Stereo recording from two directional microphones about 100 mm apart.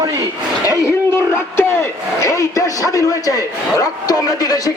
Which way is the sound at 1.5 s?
25° left (ahead or behind).